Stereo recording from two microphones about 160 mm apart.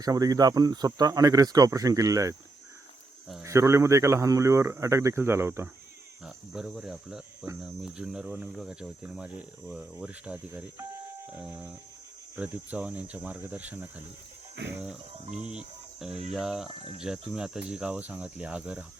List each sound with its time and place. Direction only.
0.0 s speech: 20° right (ahead or behind)
3.4 s speech: 20° right (ahead or behind)
6.2 s speech: 5° right (ahead or behind)
12.4 s speech: 10° right (ahead or behind)
15.4 s cricket: 5° right (ahead or behind)
16.3 s speech: centre (ahead or behind)